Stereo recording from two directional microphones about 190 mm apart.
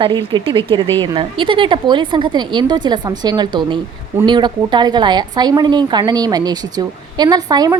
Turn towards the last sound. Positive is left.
turn(degrees=-20)  # may be behind; listen again after turning